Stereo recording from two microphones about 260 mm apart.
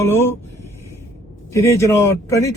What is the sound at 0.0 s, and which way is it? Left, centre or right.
A man's voice, centre.